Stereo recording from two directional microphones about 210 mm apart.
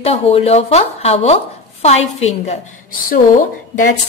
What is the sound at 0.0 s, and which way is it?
A woman's voice, 30° left (ahead or behind).